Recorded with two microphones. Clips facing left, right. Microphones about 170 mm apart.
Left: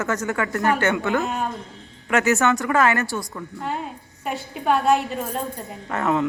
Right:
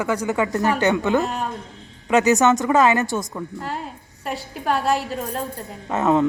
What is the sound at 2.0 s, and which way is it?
A woman's voice, 20° right (ahead or behind).